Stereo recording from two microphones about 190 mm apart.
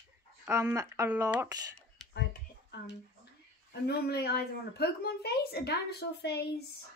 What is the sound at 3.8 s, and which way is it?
A woman's voice, 60° left (ahead or behind).